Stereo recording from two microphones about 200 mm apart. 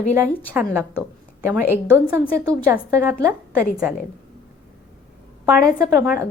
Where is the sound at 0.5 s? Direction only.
10° right (ahead or behind).